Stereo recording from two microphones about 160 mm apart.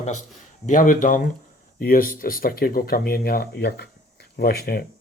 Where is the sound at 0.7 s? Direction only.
55° left (ahead or behind); by 3.8 s 90° left.